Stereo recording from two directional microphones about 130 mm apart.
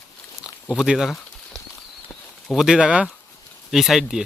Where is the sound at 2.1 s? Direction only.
15° left (ahead or behind).